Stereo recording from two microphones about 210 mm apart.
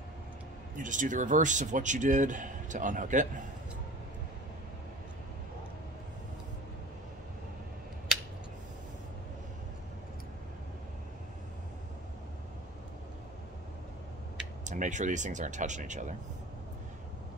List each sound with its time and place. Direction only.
0.7 s speech: 35° right (ahead or behind)
14.6 s speech: 35° right (ahead or behind)